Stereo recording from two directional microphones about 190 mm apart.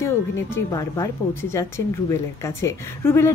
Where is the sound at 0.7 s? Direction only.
15° left (ahead or behind).